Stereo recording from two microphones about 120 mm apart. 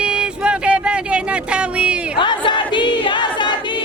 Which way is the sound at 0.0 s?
10° right (ahead or behind).